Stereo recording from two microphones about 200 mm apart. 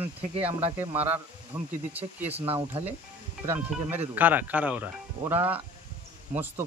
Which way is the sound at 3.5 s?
10° right (ahead or behind).